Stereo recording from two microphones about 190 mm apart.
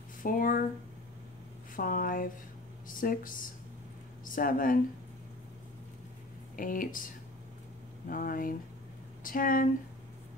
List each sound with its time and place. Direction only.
0.2 s speech: 45° left (ahead or behind)
1.8 s speech: 50° left (ahead or behind)
6.5 s speech: 45° left (ahead or behind)
8.1 s speech: 50° left (ahead or behind)